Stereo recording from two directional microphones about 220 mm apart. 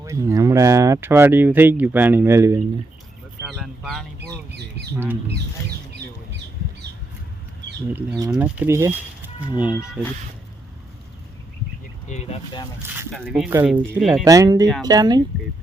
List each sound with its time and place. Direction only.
0.0 s speech: 15° right (ahead or behind)
3.4 s speech: centre (ahead or behind)
8.3 s speech: 5° right (ahead or behind)
12.0 s speech: 30° left (ahead or behind)
13.1 s speech: centre (ahead or behind)
14.0 s speech: centre (ahead or behind)
14.3 s speech: 15° right (ahead or behind)